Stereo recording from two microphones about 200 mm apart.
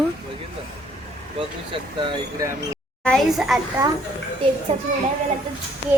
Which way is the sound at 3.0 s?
Centre (ahead or behind).